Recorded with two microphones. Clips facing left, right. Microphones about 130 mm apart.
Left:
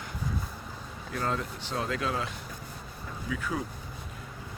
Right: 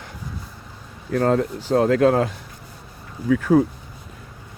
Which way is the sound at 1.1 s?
55° right (ahead or behind).